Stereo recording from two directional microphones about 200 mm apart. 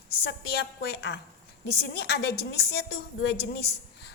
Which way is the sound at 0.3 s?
55° left (ahead or behind).